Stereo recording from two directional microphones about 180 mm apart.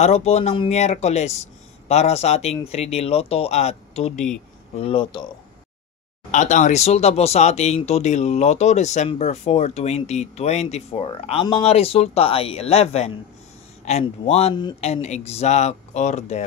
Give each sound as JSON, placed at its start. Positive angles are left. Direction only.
{"t": 0.0, "sound": "speech", "side_deg": 35}
{"t": 6.3, "sound": "speech", "side_deg": 45}
{"t": 14.5, "sound": "speech", "side_deg": 25}
{"t": 14.8, "sound": "speech", "side_deg": 40}